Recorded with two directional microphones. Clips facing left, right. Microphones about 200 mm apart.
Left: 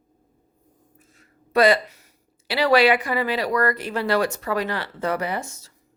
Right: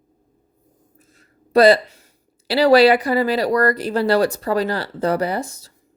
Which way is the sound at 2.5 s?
35° right (ahead or behind).